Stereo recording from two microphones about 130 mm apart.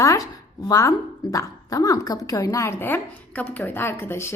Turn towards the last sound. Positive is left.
turn(degrees=20)  # may be behind; listen again after turning